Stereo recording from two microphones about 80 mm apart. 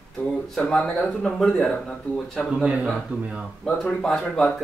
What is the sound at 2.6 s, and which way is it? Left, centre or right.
Speech, centre.